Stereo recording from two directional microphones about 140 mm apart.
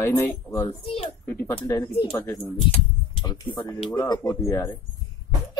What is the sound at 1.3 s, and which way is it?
Speech, 20° left (ahead or behind).